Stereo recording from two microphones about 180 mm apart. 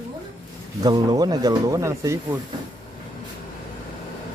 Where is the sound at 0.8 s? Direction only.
20° right (ahead or behind).